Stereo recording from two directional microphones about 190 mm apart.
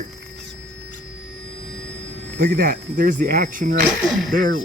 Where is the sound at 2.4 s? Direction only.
50° right (ahead or behind).